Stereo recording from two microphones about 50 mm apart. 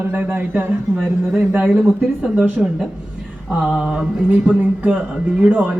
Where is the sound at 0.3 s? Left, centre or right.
Right.